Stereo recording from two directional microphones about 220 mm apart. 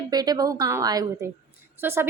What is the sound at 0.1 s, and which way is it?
A woman's voice, 15° right (ahead or behind).